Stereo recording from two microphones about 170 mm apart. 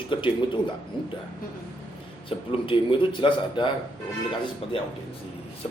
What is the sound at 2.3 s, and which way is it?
A man's voice, 30° left (ahead or behind).